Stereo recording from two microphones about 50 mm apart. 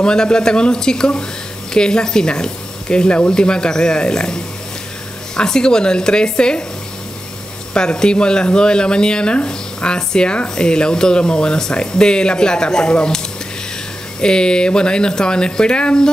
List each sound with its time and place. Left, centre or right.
0.0 s speech: centre
7.7 s speech: centre
14.2 s speech: centre